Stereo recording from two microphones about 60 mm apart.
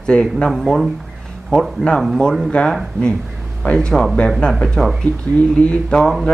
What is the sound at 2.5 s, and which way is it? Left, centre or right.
Speech, centre.